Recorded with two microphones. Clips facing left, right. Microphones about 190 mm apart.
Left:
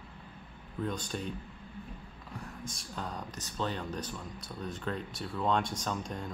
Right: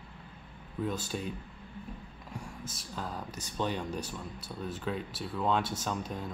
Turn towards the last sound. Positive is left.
turn(degrees=-5)  # may be behind; listen again after turning